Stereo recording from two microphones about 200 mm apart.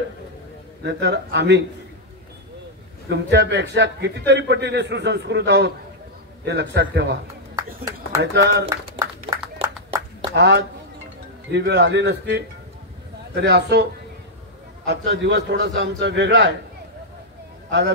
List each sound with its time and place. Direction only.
0.8 s a man's voice: 55° right (ahead or behind)
3.1 s a man's voice: 60° right (ahead or behind)
7.5 s speech: 15° right (ahead or behind)
8.2 s a man's voice: 60° right (ahead or behind)
10.3 s a man's voice: 60° right (ahead or behind)
14.9 s a man's voice: 60° right (ahead or behind)
17.6 s speech: 60° right (ahead or behind)